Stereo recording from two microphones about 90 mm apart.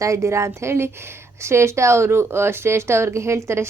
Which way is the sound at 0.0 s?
35° right (ahead or behind).